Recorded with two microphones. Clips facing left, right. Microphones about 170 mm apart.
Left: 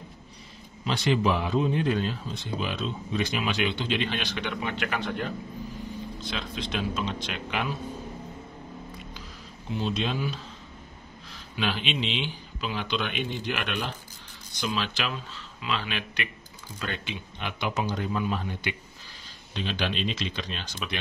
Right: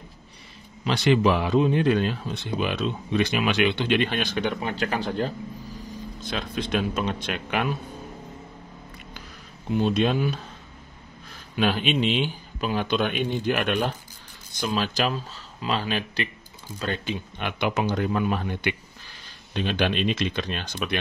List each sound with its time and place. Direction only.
0.8 s a man's voice: 75° right (ahead or behind); by 5.3 s 35° right (ahead or behind)
6.2 s speech: 50° right (ahead or behind)
9.7 s speech: 55° right (ahead or behind); by 17.2 s 40° right (ahead or behind)
17.4 s speech: 60° right (ahead or behind)